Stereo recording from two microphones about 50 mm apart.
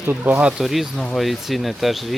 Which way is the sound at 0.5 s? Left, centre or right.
Centre.